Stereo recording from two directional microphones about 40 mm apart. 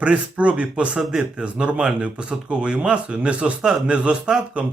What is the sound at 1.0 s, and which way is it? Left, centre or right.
Speech, centre.